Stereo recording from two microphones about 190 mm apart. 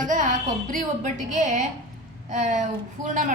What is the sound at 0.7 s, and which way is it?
A woman's voice, 40° right (ahead or behind).